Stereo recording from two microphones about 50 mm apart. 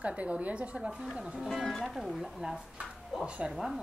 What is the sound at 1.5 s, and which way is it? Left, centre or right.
Speech, centre.